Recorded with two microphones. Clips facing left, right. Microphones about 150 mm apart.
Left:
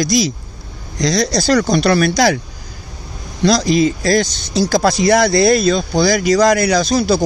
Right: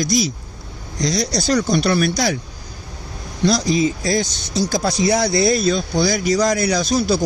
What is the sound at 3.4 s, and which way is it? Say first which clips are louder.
Speech: left 4 dB; 90° left.